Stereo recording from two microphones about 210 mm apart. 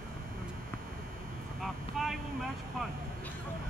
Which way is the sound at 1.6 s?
Centre (ahead or behind).